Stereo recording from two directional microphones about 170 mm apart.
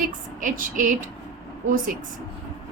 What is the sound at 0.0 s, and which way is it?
Speech, 50° right (ahead or behind).